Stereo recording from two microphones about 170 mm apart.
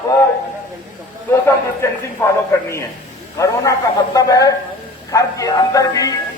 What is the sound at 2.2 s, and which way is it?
Speech, 10° left (ahead or behind).